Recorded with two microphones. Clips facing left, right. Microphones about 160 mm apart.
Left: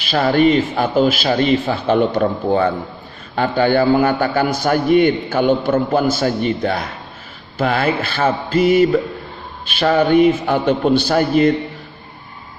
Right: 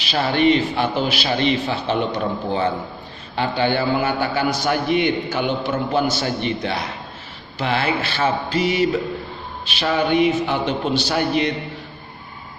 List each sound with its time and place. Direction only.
0.1 s a man's voice: 50° left (ahead or behind)